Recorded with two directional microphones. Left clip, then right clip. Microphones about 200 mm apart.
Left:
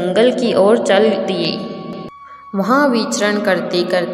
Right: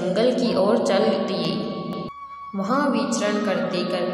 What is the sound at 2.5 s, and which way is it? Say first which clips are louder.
A woman's voice: left 8 dB; 35° left (ahead or behind).